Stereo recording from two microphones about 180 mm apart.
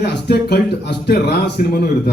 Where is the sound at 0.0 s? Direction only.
65° left (ahead or behind).